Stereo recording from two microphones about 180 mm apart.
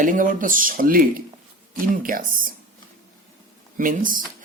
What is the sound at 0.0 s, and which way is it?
Speech, 50° right (ahead or behind).